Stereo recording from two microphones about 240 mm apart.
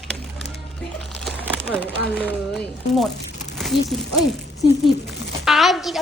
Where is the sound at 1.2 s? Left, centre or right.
Centre.